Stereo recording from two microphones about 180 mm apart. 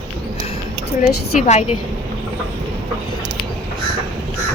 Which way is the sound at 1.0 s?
40° left (ahead or behind).